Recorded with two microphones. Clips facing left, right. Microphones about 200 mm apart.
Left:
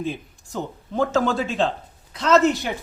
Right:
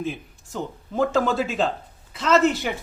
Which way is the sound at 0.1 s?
Centre (ahead or behind).